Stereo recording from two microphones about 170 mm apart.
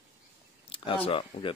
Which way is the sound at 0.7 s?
30° left (ahead or behind).